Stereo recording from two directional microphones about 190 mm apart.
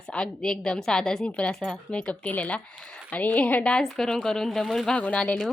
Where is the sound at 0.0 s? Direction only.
5° left (ahead or behind).